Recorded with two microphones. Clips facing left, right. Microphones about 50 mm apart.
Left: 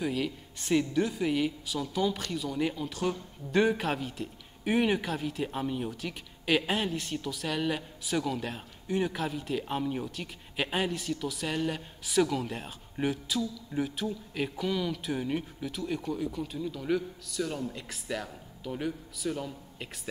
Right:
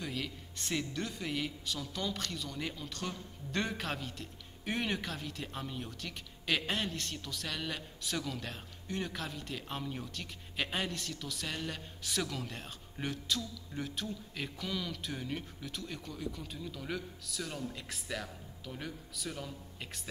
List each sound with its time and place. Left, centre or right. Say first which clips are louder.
0.0 s a man's voice: left 8 dB; centre